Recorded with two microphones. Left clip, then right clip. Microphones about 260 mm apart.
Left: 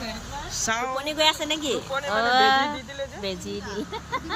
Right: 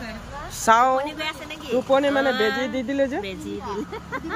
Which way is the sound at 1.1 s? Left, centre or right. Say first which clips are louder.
Left 8 dB; centre.